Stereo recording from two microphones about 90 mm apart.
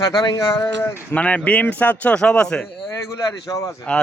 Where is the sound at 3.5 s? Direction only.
40° left (ahead or behind).